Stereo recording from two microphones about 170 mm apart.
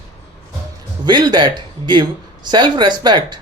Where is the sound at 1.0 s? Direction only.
25° right (ahead or behind).